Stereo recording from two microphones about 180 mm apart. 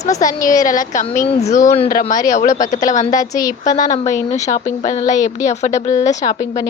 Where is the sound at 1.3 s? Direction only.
35° left (ahead or behind).